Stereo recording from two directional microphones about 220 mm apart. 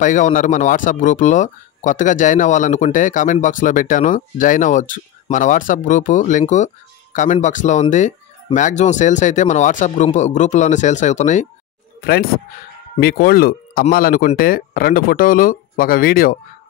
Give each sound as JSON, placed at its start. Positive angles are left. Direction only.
{"t": 0.0, "sound": "speech", "side_deg": 35}
{"t": 12.0, "sound": "speech", "side_deg": 45}